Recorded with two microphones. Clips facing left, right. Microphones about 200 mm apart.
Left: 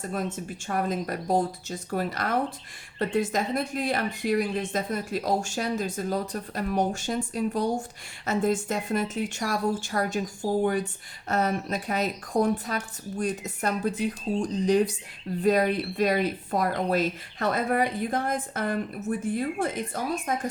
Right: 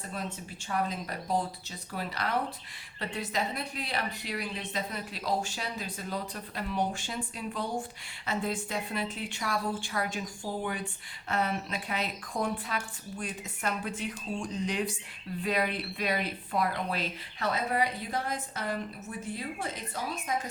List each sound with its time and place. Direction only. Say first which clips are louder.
0.1 s a woman's voice: left 6 dB; 50° left (ahead or behind)